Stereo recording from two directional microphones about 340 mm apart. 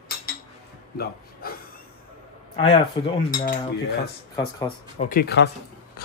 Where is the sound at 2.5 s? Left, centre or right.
Centre.